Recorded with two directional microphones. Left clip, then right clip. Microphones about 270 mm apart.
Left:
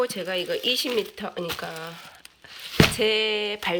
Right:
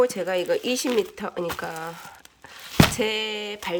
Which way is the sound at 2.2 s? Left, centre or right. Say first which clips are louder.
Left 2 dB; right.